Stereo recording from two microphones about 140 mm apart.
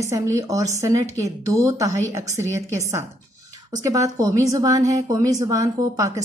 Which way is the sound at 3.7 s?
25° right (ahead or behind).